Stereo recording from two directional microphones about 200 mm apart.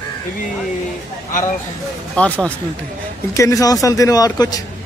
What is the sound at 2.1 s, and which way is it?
A man's voice, 5° left (ahead or behind).